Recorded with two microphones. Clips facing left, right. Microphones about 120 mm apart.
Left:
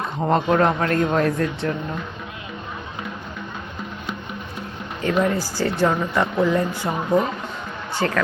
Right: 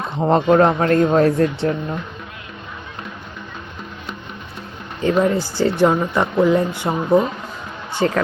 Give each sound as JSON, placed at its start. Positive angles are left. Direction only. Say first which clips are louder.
{"t": 0.3, "sound": "a man's voice", "louder": "right 5 dB", "side_deg": -30}
{"t": 5.0, "sound": "speech", "louder": "right 4 dB", "side_deg": -25}